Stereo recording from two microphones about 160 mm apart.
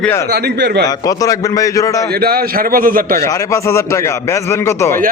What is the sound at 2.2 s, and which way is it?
Speech, 70° right (ahead or behind).